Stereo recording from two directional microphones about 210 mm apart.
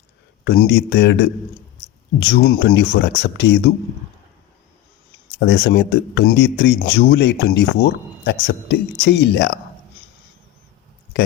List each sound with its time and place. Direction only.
0.4 s speech: 55° left (ahead or behind)
5.4 s speech: 55° left (ahead or behind)